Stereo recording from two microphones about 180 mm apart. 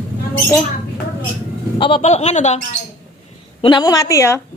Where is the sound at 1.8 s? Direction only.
35° left (ahead or behind).